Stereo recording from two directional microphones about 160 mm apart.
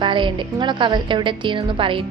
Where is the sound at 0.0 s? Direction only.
30° right (ahead or behind).